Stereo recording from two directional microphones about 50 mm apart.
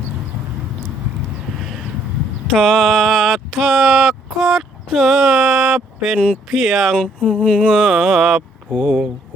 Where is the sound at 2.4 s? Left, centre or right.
Centre.